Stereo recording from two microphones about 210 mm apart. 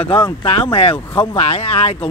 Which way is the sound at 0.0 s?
25° left (ahead or behind).